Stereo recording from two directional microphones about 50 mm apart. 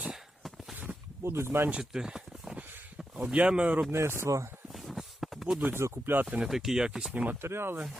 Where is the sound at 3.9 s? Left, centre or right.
Right.